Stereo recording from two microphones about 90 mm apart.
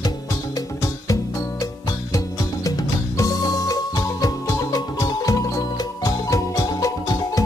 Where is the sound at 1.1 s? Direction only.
40° left (ahead or behind).